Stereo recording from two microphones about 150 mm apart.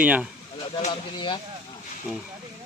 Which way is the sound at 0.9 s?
30° left (ahead or behind).